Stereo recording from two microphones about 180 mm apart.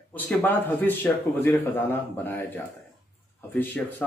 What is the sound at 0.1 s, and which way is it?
Speech, 10° left (ahead or behind).